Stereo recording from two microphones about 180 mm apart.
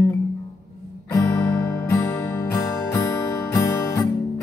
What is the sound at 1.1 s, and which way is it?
Music, 15° left (ahead or behind).